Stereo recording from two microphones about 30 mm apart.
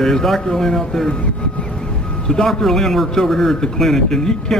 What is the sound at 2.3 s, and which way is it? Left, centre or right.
Speech, left.